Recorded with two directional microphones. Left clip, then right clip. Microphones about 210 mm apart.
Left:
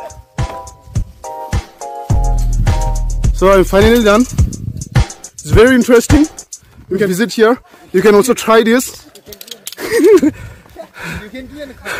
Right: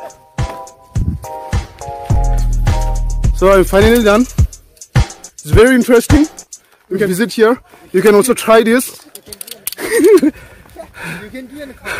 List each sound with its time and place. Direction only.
0.4 s music: centre (ahead or behind)
9.5 s a sound: 5° right (ahead or behind)
11.3 s speech: 50° right (ahead or behind)